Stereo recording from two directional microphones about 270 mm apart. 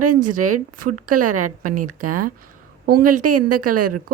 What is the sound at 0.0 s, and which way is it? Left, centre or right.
A woman's voice, right.